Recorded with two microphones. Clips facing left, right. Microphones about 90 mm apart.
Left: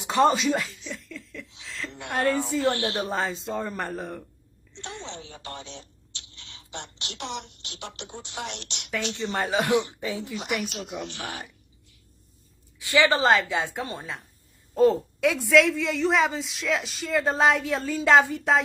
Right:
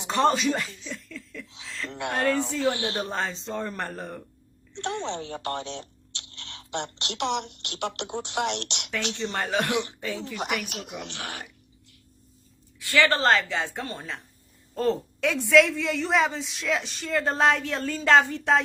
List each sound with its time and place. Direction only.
0.1 s chuckle: 5° left (ahead or behind)
1.9 s a sound: 70° right (ahead or behind)
2.1 s a woman's voice: 5° left (ahead or behind)
2.7 s speech: 20° right (ahead or behind)
3.0 s a woman's voice: 5° left (ahead or behind)
4.7 s speech: 60° right (ahead or behind)
9.1 s a woman's voice: 5° left (ahead or behind)
10.3 s speech: 55° right (ahead or behind)
12.8 s a woman's voice: 20° left (ahead or behind)
14.8 s a woman's voice: centre (ahead or behind)